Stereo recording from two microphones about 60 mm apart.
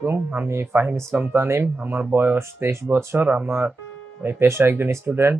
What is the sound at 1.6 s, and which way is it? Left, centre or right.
Speech, right.